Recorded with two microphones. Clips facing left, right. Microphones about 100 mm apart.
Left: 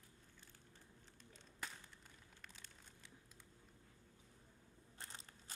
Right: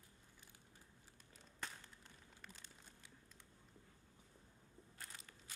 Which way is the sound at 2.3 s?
5° right (ahead or behind).